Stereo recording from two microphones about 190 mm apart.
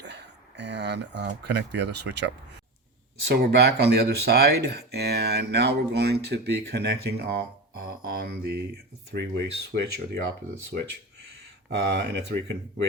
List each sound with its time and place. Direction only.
0.0 s speech: 65° right (ahead or behind)
11.7 s speech: 60° right (ahead or behind)